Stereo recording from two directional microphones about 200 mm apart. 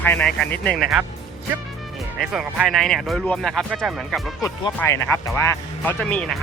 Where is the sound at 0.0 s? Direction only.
5° left (ahead or behind).